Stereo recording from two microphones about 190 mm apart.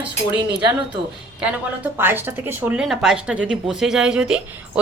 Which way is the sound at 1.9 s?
10° right (ahead or behind).